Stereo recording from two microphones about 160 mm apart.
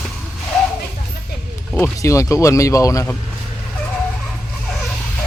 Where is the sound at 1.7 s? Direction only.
15° left (ahead or behind).